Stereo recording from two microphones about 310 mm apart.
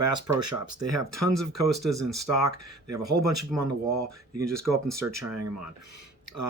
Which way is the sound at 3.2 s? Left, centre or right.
Right.